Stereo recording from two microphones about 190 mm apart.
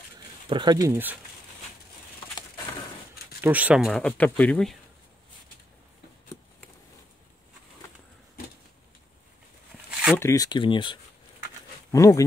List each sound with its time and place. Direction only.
0.5 s speech: 25° right (ahead or behind)
3.3 s speech: 10° right (ahead or behind)
9.8 s a sound: 5° right (ahead or behind)
10.1 s speech: 15° left (ahead or behind)